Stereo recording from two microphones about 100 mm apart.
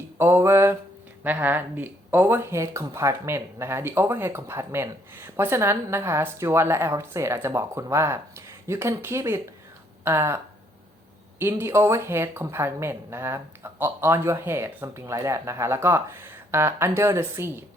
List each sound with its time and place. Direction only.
0.2 s speech: 25° right (ahead or behind)